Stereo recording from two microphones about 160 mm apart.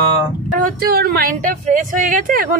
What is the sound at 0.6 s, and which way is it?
A woman's voice, 75° right (ahead or behind).